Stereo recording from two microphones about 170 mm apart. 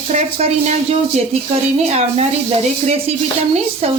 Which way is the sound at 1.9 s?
40° right (ahead or behind).